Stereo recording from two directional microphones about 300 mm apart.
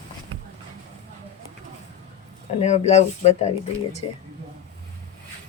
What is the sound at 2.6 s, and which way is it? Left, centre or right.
Speech, left.